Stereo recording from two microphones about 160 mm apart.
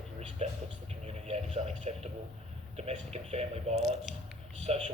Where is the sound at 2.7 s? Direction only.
40° right (ahead or behind).